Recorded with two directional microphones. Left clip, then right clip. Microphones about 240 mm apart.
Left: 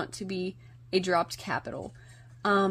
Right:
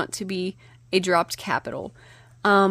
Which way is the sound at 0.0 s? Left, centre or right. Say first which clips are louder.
Right 6 dB; right.